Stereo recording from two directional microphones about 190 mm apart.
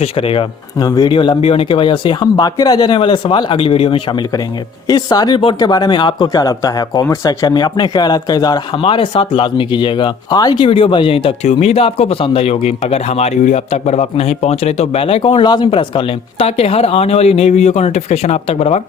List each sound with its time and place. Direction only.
0.0 s speech: 30° left (ahead or behind)